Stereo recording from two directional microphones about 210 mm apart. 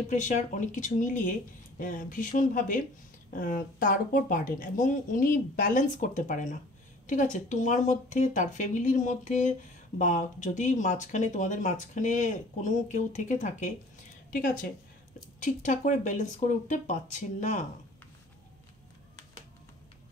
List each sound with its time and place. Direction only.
0.1 s speech: 35° left (ahead or behind)
15.4 s speech: 40° left (ahead or behind)